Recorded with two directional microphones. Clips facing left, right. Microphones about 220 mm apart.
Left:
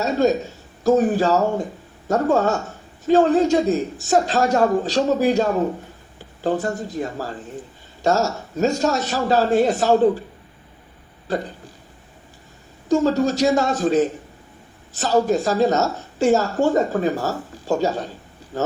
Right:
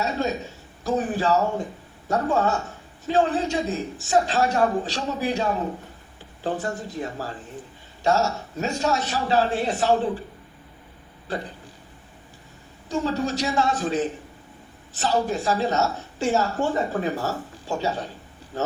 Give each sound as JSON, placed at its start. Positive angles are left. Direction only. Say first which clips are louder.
{"t": 0.0, "sound": "a man's voice", "louder": "left 7 dB", "side_deg": 45}
{"t": 12.9, "sound": "speech", "louder": "left 7 dB", "side_deg": 45}